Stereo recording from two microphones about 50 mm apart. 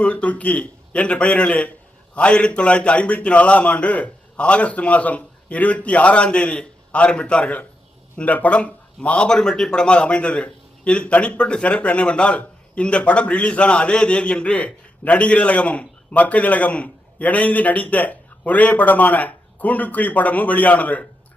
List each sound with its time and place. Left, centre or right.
0.0 s a man's voice: left